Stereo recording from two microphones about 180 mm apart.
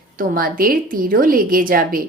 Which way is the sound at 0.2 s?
50° right (ahead or behind).